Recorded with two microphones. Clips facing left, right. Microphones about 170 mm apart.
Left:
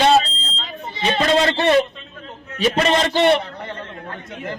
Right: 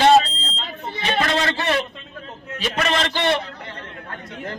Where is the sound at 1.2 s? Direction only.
25° left (ahead or behind).